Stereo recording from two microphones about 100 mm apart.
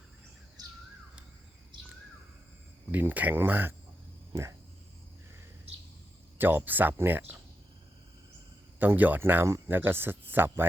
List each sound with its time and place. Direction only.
2.9 s speech: 20° right (ahead or behind)
6.4 s speech: 20° right (ahead or behind)
8.8 s speech: 20° right (ahead or behind)